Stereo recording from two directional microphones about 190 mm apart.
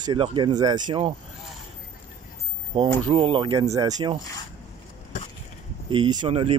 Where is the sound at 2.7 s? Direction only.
25° right (ahead or behind).